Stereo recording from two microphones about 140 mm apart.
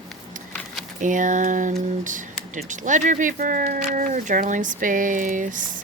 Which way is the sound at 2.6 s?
65° right (ahead or behind).